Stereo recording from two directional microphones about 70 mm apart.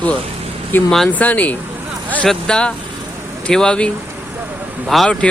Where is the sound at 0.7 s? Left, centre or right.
Left.